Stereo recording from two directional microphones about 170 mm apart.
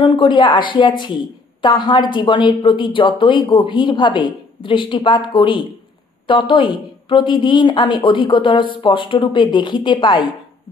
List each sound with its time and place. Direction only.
0.0 s a woman's voice: 25° left (ahead or behind)